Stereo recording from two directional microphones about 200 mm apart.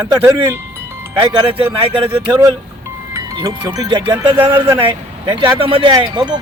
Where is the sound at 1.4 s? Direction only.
25° right (ahead or behind).